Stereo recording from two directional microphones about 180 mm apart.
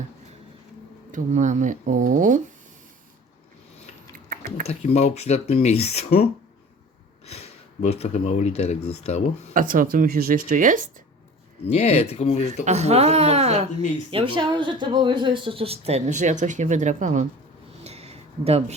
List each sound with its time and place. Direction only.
1.1 s speech: 45° right (ahead or behind)
4.6 s speech: 35° left (ahead or behind)
7.3 s speech: 35° left (ahead or behind)
9.6 s speech: 50° right (ahead or behind)
11.7 s speech: 35° left (ahead or behind)
12.6 s speech: 40° right (ahead or behind)
17.8 s a sound: 35° right (ahead or behind)